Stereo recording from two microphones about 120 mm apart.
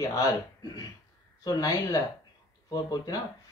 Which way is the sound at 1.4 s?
30° left (ahead or behind).